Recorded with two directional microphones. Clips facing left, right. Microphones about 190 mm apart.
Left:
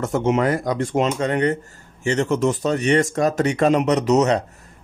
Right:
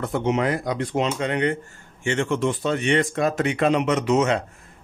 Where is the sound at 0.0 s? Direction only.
45° left (ahead or behind).